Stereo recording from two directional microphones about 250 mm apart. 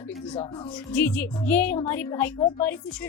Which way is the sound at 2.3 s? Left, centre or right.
Left.